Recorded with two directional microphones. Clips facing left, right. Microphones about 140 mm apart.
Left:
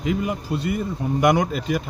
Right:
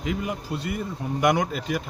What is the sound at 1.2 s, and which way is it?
Speech, 20° left (ahead or behind).